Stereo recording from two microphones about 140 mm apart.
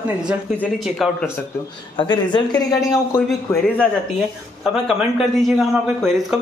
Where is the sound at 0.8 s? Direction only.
Centre (ahead or behind).